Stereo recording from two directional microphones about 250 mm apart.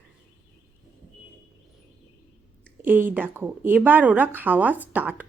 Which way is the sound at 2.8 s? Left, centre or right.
Centre.